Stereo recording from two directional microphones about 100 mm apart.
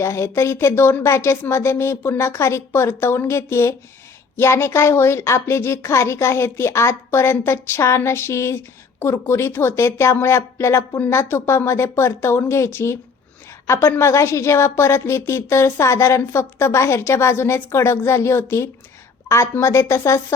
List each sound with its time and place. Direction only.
0.0 s a woman's voice: 30° left (ahead or behind)